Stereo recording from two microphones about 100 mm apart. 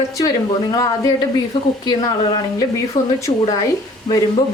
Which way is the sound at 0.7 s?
40° left (ahead or behind).